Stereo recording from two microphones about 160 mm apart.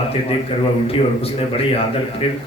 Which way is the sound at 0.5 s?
35° left (ahead or behind).